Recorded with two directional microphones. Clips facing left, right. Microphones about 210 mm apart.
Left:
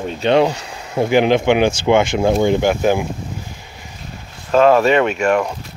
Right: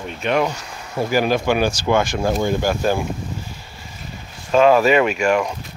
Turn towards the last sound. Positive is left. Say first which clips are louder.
# left 1 dB
turn(degrees=-5)  # may be behind; listen again after turning